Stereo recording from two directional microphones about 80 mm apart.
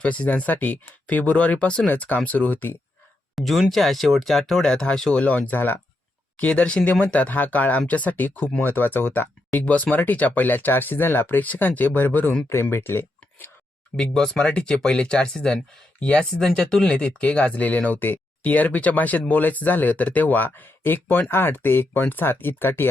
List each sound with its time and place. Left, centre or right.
0.0 s speech: centre
3.3 s speech: centre; by 13.5 s left
13.9 s speech: centre; by 22.9 s left